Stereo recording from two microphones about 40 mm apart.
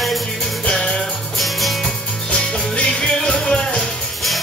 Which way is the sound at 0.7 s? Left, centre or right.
Left.